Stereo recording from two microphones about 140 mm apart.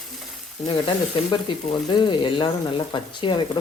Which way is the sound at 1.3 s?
35° left (ahead or behind).